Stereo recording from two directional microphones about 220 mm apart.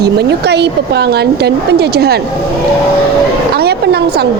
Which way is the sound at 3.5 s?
45° right (ahead or behind).